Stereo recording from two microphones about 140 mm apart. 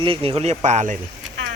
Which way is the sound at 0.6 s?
55° right (ahead or behind).